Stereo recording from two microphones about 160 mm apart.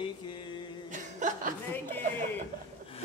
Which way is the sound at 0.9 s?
50° right (ahead or behind).